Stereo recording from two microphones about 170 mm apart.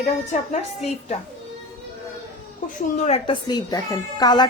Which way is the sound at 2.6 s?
45° left (ahead or behind).